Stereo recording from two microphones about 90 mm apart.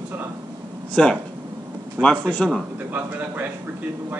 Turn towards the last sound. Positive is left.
turn(degrees=-20)  # may be behind; listen again after turning